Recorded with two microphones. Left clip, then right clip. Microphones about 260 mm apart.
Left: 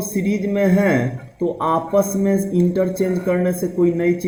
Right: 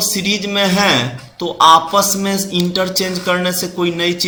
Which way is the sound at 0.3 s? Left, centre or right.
Right.